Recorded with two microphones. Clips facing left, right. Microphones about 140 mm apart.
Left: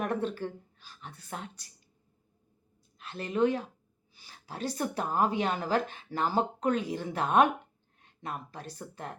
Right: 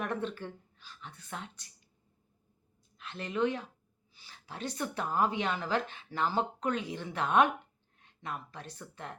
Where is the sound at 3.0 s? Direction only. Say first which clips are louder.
Left 4 dB; 35° left (ahead or behind).